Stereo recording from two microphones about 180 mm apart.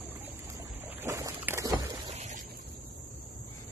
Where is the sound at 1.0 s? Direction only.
15° right (ahead or behind).